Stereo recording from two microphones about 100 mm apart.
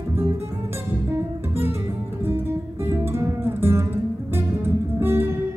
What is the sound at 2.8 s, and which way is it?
Music, 25° right (ahead or behind).